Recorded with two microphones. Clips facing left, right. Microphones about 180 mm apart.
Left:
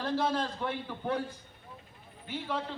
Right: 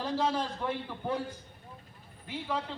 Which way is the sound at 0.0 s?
10° right (ahead or behind).